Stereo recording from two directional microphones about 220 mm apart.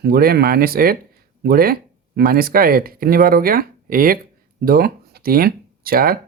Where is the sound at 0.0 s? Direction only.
45° right (ahead or behind).